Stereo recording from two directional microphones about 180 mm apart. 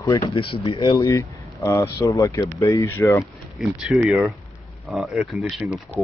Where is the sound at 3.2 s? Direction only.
Centre (ahead or behind).